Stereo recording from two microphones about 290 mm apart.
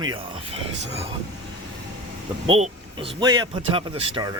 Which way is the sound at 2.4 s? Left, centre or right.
Centre.